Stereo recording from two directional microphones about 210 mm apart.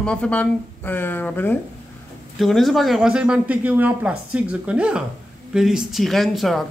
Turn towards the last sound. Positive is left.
turn(degrees=0)  # may be behind; listen again after turning